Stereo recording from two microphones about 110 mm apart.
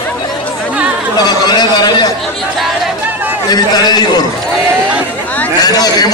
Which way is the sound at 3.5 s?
35° left (ahead or behind).